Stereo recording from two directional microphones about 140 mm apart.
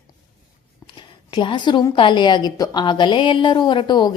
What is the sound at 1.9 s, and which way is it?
A woman's voice, 35° left (ahead or behind).